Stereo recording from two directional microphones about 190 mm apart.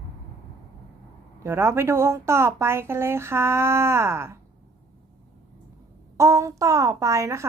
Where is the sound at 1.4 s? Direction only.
15° right (ahead or behind).